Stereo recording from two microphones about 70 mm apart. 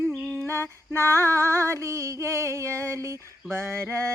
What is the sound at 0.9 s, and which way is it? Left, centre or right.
Female singing, right.